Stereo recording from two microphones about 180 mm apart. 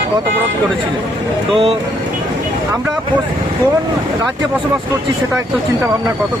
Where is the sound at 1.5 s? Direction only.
30° right (ahead or behind).